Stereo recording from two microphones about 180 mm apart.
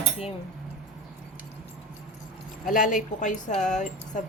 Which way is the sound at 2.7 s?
45° left (ahead or behind).